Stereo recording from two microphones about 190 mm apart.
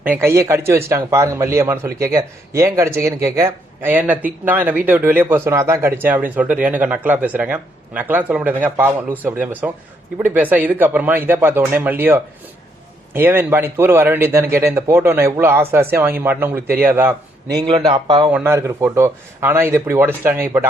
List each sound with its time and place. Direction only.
0.0 s a man's voice: 10° right (ahead or behind)
17.6 s speech: 25° right (ahead or behind)
18.3 s a man's voice: 10° right (ahead or behind)